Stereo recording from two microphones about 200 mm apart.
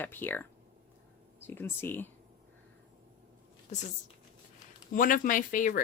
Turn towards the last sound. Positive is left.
turn(degrees=40)  # may be behind; listen again after turning